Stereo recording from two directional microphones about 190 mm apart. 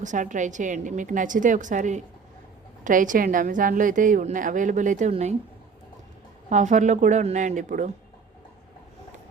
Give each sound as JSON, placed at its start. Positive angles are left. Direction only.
{"t": 0.0, "sound": "a woman's voice", "side_deg": -40}
{"t": 6.5, "sound": "a woman's voice", "side_deg": -40}